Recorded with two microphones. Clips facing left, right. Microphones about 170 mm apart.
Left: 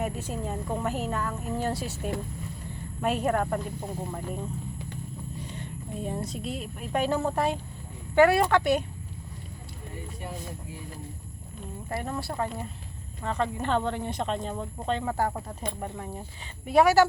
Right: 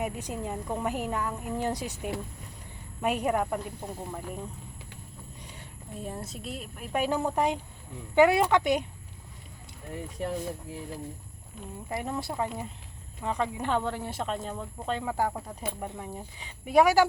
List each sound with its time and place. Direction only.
0.0 s a woman's voice: 15° right (ahead or behind)
5.5 s a woman's voice: 5° right (ahead or behind)
11.9 s a woman's voice: 15° right (ahead or behind)